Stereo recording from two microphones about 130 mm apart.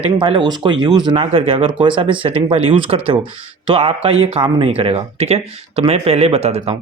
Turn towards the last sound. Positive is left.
turn(degrees=-50)  # may be behind; listen again after turning